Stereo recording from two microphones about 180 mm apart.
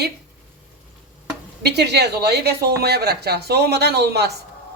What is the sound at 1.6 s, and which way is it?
A woman's voice, 65° right (ahead or behind).